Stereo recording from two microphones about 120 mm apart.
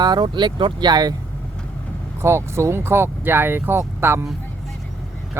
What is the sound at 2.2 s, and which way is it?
Speech, 20° right (ahead or behind).